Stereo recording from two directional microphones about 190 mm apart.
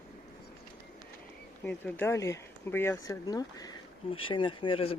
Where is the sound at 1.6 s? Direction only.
10° left (ahead or behind).